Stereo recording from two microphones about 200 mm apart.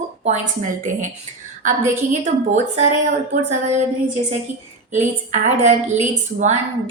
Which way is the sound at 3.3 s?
35° right (ahead or behind).